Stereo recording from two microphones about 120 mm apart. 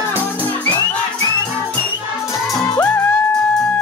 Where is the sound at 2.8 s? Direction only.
10° left (ahead or behind).